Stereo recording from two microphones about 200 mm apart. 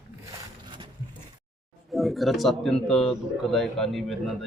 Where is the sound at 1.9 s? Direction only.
Centre (ahead or behind).